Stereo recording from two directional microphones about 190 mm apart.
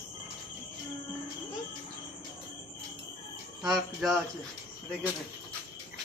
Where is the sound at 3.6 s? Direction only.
5° right (ahead or behind).